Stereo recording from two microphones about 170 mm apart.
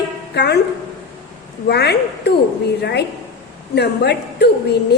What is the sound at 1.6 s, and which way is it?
Speech, 75° left (ahead or behind).